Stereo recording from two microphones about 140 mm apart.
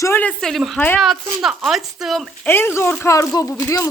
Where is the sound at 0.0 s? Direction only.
15° left (ahead or behind).